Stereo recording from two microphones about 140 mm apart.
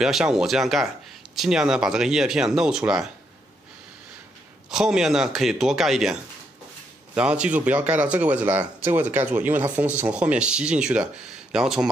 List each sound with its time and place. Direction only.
0.0 s speech: 5° right (ahead or behind)
4.6 s speech: 5° right (ahead or behind)
7.2 s speech: 5° right (ahead or behind)